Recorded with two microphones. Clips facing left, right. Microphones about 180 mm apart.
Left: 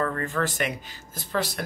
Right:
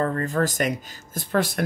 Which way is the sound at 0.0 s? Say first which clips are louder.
Right 4 dB; 35° right (ahead or behind).